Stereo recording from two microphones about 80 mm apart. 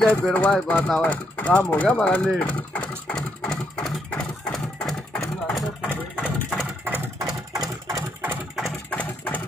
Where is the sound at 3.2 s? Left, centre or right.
Centre.